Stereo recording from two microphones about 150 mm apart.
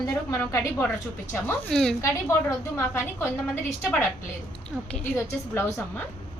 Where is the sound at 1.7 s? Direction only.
5° left (ahead or behind).